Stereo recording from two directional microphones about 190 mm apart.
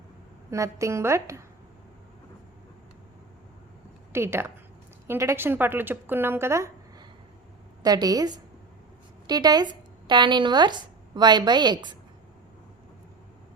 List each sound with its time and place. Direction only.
0.5 s a woman's voice: 15° right (ahead or behind)
4.1 s a woman's voice: 15° right (ahead or behind)